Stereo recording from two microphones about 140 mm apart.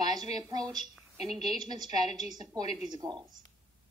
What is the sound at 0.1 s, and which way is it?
Speech, 30° right (ahead or behind).